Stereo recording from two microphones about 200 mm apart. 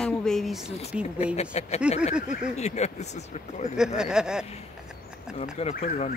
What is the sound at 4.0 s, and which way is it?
Speech, 5° right (ahead or behind).